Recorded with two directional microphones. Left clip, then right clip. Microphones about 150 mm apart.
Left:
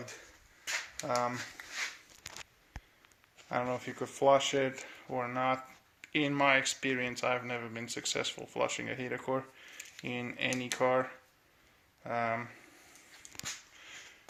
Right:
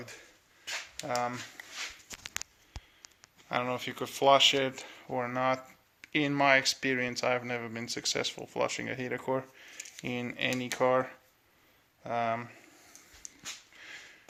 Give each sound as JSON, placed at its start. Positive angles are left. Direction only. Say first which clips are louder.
{"t": 1.0, "sound": "speech", "louder": "even", "side_deg": 0}
{"t": 3.5, "sound": "speech", "louder": "right 2 dB", "side_deg": -10}
{"t": 12.0, "sound": "speech", "louder": "right 2 dB", "side_deg": -15}